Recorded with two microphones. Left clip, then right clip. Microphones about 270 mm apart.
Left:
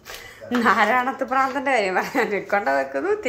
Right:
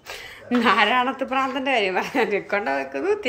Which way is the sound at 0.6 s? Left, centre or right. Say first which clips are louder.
Even; centre.